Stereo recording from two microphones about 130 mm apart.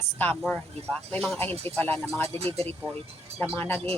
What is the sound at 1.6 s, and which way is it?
Speech, 15° left (ahead or behind).